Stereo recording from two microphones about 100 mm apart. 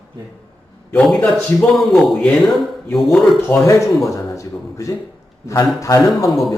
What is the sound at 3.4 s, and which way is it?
Speech, 25° left (ahead or behind).